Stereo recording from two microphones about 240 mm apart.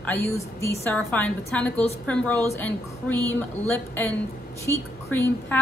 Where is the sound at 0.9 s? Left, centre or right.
Centre.